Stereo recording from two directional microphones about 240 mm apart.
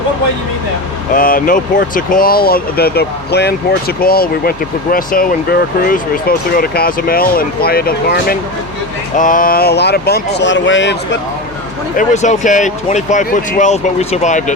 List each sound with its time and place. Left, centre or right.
1.1 s speech: left
11.9 s speech: left